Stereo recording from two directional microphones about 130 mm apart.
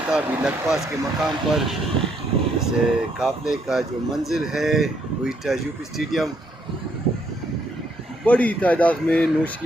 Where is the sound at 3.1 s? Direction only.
5° right (ahead or behind).